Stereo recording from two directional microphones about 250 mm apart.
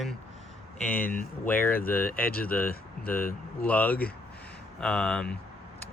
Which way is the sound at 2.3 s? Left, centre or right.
Left.